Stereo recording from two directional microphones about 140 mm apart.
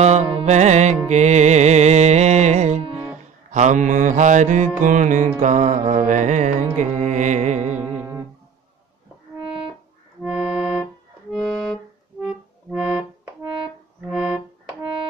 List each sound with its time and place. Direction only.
0.0 s music: 50° right (ahead or behind)
3.5 s mantra: 60° right (ahead or behind)
6.8 s music: 60° right (ahead or behind)
9.5 s music: 35° right (ahead or behind)
10.2 s accordion: 5° right (ahead or behind)
11.3 s accordion: 5° left (ahead or behind)
14.0 s accordion: 5° right (ahead or behind)